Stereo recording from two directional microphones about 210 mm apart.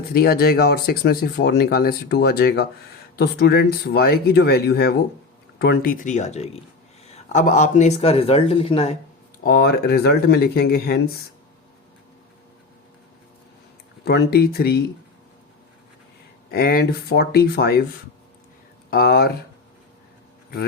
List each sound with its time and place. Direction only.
0.1 s speech: 45° left (ahead or behind); by 9.0 s 30° left (ahead or behind)
9.4 s speech: 45° left (ahead or behind)
14.0 s speech: 50° left (ahead or behind)
16.5 s speech: 45° left (ahead or behind)
18.9 s speech: 45° left (ahead or behind)